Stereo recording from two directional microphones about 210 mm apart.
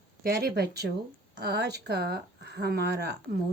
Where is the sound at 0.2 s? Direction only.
45° right (ahead or behind).